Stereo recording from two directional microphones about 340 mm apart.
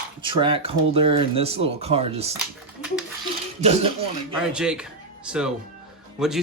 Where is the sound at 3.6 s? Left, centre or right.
Centre.